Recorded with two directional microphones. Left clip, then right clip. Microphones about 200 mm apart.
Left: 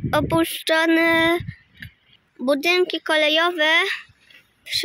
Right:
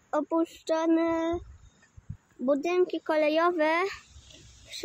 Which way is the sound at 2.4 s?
10° left (ahead or behind).